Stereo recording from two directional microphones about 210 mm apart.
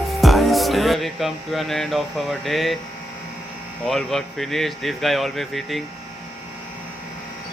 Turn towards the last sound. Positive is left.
turn(degrees=0)  # may be behind; listen again after turning